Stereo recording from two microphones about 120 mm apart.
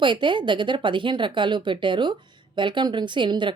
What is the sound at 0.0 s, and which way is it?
Speech, 40° right (ahead or behind).